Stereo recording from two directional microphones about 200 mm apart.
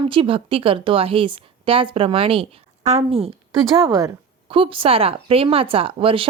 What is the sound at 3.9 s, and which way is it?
Speech, 20° right (ahead or behind).